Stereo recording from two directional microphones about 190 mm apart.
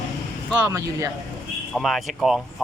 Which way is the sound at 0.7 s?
20° right (ahead or behind).